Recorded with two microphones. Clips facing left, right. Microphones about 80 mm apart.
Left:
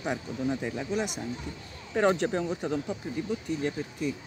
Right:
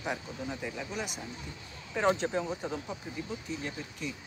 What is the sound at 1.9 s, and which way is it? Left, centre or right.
Speech, left.